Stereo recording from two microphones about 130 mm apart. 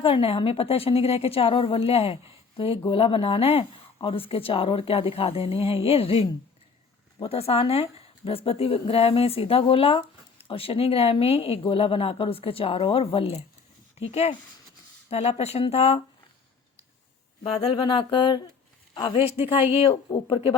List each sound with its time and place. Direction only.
0.0 s speech: 45° left (ahead or behind)
17.4 s a sound: 45° left (ahead or behind)
18.9 s speech: 45° left (ahead or behind)